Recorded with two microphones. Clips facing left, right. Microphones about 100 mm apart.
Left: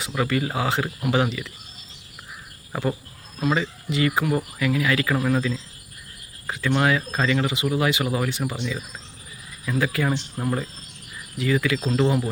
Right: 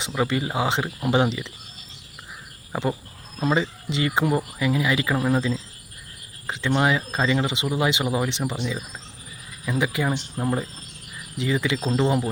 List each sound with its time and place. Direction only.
0.0 s speech: 25° right (ahead or behind)
3.4 s speech: 25° right (ahead or behind)
9.6 s speech: 20° right (ahead or behind)